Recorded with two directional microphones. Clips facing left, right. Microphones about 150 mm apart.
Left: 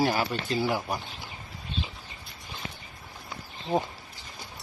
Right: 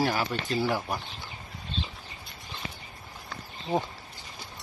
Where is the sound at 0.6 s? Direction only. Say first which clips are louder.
Even; 10° left (ahead or behind).